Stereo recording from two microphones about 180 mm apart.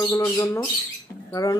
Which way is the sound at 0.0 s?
10° left (ahead or behind).